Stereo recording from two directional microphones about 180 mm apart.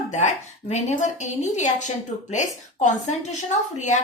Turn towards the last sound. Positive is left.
turn(degrees=40)  # may be behind; listen again after turning